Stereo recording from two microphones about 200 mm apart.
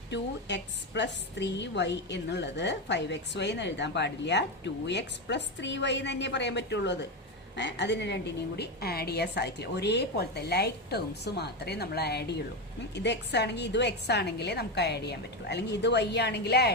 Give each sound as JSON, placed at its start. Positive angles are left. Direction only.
{"t": 0.1, "sound": "a woman's voice", "side_deg": 60}